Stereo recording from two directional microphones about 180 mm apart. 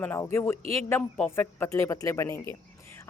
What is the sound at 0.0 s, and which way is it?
A woman's voice, 15° left (ahead or behind).